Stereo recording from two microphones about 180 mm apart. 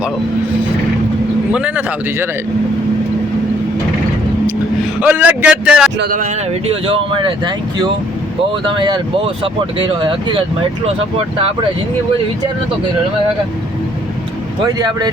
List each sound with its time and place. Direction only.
1.5 s a man's voice: 10° right (ahead or behind)
4.9 s a man's voice: 10° right (ahead or behind)
6.0 s speech: 50° right (ahead or behind)
6.5 s speech: 30° right (ahead or behind)
14.6 s speech: 25° right (ahead or behind)